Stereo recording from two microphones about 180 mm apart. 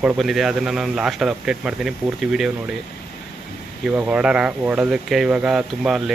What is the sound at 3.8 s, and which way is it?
Speech, 5° right (ahead or behind).